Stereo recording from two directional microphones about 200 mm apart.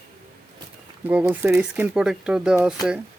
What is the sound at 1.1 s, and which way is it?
Speech, 5° right (ahead or behind).